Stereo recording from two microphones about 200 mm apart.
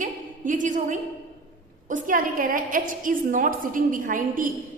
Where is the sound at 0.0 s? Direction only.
40° right (ahead or behind).